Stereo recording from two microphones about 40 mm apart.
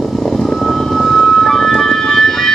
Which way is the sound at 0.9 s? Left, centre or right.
Centre.